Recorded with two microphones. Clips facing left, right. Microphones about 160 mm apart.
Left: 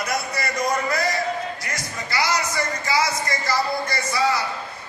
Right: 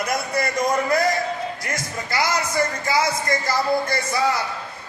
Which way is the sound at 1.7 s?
50° right (ahead or behind).